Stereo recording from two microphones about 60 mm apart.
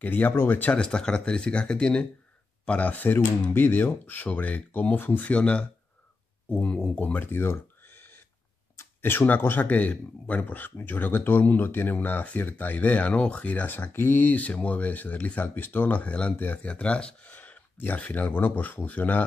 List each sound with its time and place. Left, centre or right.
0.0 s speech: left
0.7 s speech: centre
7.2 s a sound: left
8.7 s speech: left